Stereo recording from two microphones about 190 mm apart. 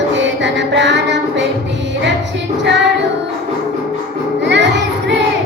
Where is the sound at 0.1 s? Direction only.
70° right (ahead or behind).